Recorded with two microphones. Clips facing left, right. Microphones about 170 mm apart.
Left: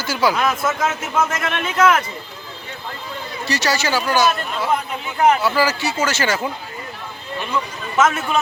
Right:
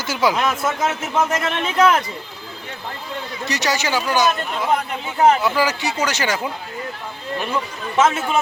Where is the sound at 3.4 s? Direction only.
20° right (ahead or behind).